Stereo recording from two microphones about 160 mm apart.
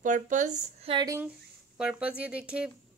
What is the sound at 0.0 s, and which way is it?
Speech, 50° right (ahead or behind).